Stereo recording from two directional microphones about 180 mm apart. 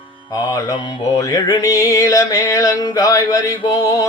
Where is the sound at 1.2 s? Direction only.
20° left (ahead or behind).